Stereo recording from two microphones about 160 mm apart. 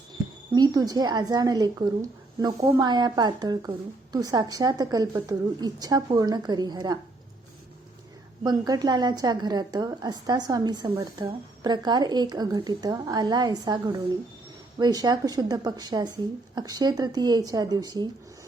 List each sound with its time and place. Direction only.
0.5 s a woman's voice: 25° right (ahead or behind)
8.4 s a woman's voice: 25° right (ahead or behind)